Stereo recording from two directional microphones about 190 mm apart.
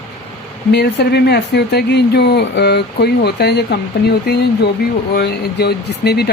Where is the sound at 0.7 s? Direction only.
60° left (ahead or behind).